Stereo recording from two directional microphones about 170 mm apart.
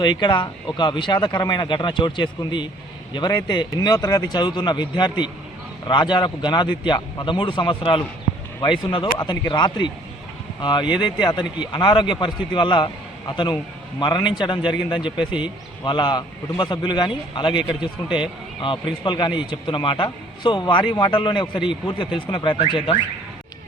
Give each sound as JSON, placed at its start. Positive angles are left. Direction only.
{"t": 0.0, "sound": "speech", "side_deg": 25}
{"t": 9.1, "sound": "speech", "side_deg": 25}
{"t": 19.0, "sound": "speech", "side_deg": 25}